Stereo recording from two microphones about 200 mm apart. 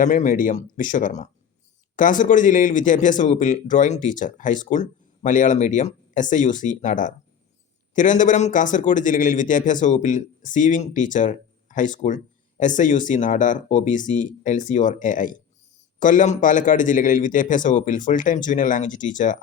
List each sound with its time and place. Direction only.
0.0 s speech: 40° left (ahead or behind)